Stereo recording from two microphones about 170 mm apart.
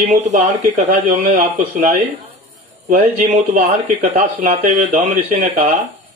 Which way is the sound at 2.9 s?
35° right (ahead or behind).